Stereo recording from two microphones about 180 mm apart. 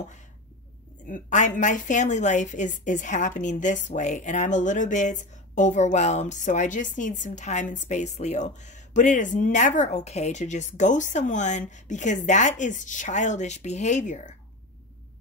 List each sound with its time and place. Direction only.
1.0 s a woman's voice: 45° left (ahead or behind)